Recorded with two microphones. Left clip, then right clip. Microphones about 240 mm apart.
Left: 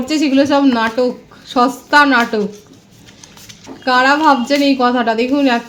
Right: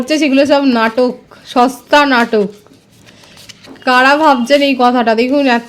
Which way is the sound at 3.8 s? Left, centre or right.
Right.